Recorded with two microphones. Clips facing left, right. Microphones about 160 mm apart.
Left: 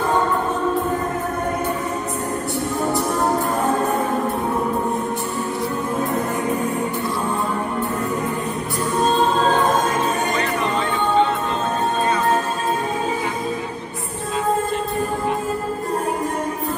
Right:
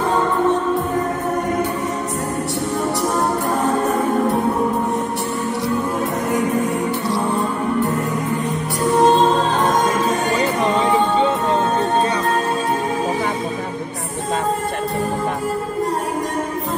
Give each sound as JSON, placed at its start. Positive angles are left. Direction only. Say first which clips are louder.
{"t": 9.0, "sound": "music", "louder": "right 2 dB", "side_deg": -80}